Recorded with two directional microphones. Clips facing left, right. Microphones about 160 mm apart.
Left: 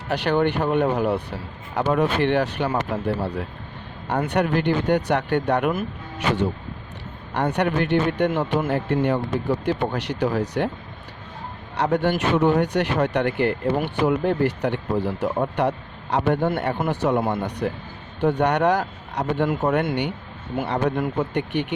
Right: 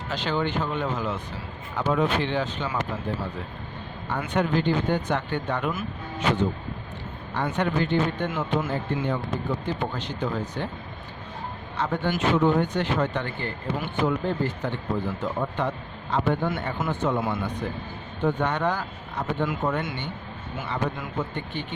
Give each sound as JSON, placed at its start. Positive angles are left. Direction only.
{"t": 0.1, "sound": "speech", "side_deg": 65}
{"t": 4.3, "sound": "speech", "side_deg": 70}
{"t": 7.5, "sound": "speech", "side_deg": 70}
{"t": 11.7, "sound": "a man's voice", "side_deg": 75}
{"t": 16.5, "sound": "speech", "side_deg": 60}
{"t": 19.7, "sound": "speech", "side_deg": 65}